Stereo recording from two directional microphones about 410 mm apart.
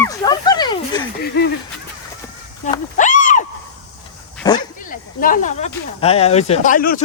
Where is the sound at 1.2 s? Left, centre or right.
Left.